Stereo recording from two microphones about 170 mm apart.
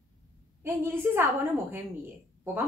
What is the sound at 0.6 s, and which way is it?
Speech, 15° right (ahead or behind).